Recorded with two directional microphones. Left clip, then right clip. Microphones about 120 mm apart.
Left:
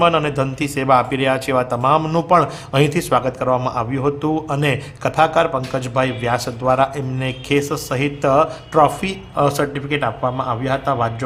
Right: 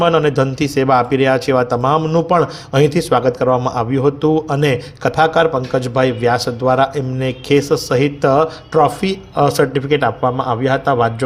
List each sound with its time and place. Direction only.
0.0 s speech: 30° right (ahead or behind)
2.0 s a man's voice: centre (ahead or behind)
2.3 s speech: 25° right (ahead or behind)
3.6 s a man's voice: 35° right (ahead or behind)
4.0 s a man's voice: 15° right (ahead or behind)